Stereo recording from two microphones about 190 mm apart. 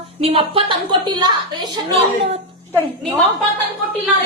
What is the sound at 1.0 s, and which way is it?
Speech, 25° right (ahead or behind).